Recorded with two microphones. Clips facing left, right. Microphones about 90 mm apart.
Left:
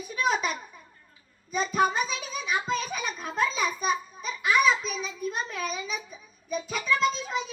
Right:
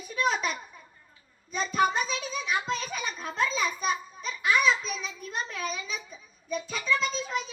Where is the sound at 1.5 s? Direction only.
5° left (ahead or behind).